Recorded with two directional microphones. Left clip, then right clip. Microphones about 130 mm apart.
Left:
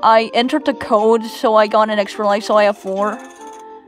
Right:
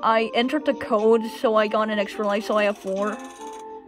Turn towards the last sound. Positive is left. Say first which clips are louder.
# left 7 dB
turn(degrees=50)  # may be behind; listen again after turning